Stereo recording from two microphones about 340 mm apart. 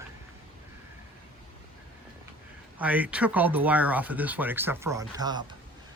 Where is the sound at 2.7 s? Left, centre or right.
Centre.